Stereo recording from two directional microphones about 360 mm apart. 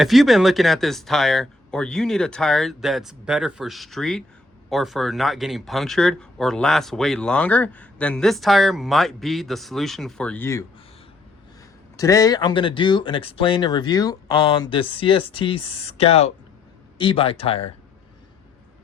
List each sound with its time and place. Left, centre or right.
0.0 s speech: centre
11.9 s speech: centre